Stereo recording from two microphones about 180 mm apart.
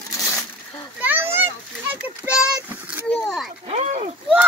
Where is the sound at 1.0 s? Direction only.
10° right (ahead or behind).